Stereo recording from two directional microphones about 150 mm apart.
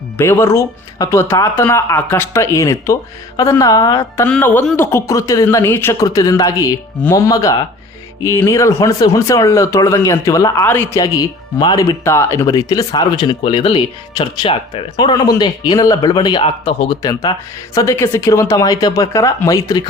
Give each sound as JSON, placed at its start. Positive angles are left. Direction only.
{"t": 0.2, "sound": "speech", "side_deg": 15}
{"t": 4.3, "sound": "speech", "side_deg": 10}
{"t": 17.0, "sound": "speech", "side_deg": 25}